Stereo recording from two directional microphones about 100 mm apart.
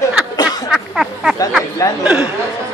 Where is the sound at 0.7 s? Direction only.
5° right (ahead or behind).